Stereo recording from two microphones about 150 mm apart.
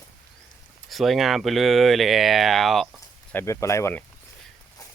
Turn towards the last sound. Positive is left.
turn(degrees=15)  # may be behind; listen again after turning